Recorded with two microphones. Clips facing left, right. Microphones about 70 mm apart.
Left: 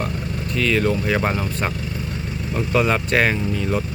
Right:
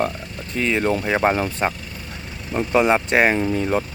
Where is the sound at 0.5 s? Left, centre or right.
Right.